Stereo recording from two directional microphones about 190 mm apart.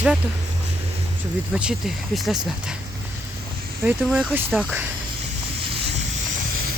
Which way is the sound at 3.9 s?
5° right (ahead or behind).